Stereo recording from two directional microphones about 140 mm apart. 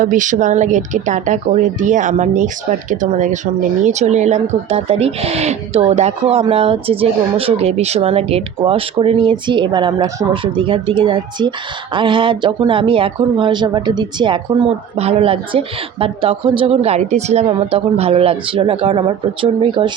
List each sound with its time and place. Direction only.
0.0 s speech: 70° right (ahead or behind); by 17.5 s 50° right (ahead or behind)
17.5 s speech: 40° right (ahead or behind)